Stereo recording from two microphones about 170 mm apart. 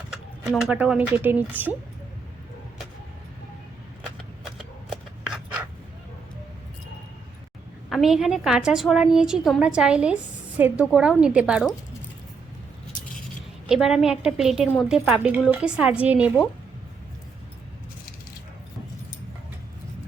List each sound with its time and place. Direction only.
0.1 s speech: 5° right (ahead or behind)
4.5 s a sound: centre (ahead or behind)
7.9 s a woman's voice: centre (ahead or behind)
13.7 s a woman's voice: centre (ahead or behind)